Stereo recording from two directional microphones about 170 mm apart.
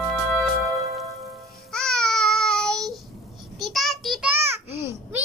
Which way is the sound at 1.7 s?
5° left (ahead or behind).